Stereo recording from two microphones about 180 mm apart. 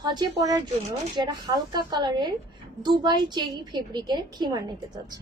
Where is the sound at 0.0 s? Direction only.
25° right (ahead or behind).